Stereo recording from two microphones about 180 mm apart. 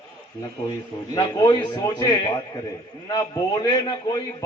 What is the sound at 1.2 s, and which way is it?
A man's voice, 25° left (ahead or behind).